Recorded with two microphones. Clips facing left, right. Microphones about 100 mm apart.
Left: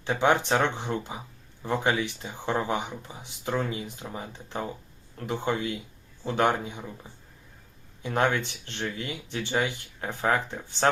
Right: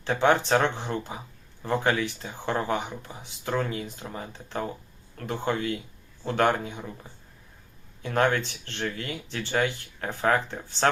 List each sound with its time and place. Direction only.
0.0 s speech: 15° left (ahead or behind)
8.0 s speech: 20° left (ahead or behind)